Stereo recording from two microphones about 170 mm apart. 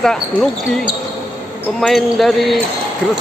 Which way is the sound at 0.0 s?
5° left (ahead or behind).